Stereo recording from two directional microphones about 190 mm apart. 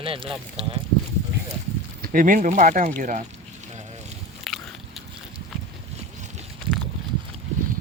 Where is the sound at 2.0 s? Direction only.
45° right (ahead or behind).